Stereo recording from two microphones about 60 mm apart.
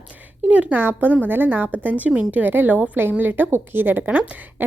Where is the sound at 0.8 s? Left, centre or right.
Right.